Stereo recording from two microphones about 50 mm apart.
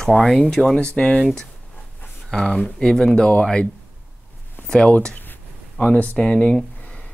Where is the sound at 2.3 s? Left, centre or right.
Centre.